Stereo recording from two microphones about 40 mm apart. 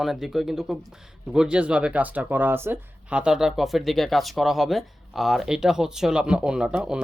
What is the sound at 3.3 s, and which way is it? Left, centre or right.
Speech, centre.